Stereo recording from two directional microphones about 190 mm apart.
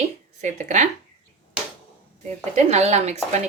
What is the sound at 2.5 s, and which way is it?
Speech, 35° right (ahead or behind).